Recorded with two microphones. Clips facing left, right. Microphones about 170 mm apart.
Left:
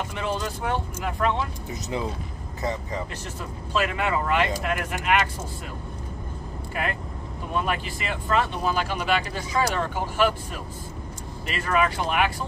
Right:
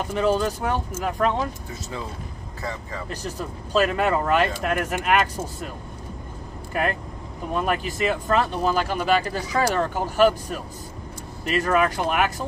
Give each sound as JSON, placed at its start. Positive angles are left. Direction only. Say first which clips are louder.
{"t": 0.0, "sound": "speech", "louder": "right 7 dB", "side_deg": -40}
{"t": 1.7, "sound": "speech", "louder": "left 4 dB", "side_deg": 20}
{"t": 3.1, "sound": "speech", "louder": "right 4 dB", "side_deg": -40}
{"t": 7.5, "sound": "speech", "louder": "right 3 dB", "side_deg": -45}